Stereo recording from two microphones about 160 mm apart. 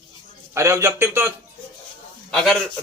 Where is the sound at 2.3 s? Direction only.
Centre (ahead or behind).